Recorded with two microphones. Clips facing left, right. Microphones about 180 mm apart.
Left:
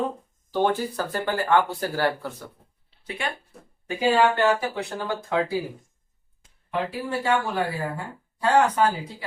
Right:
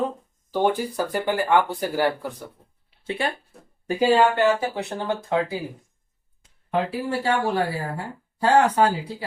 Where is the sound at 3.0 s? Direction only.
25° right (ahead or behind).